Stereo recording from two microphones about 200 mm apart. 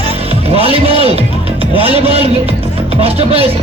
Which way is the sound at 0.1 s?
30° right (ahead or behind).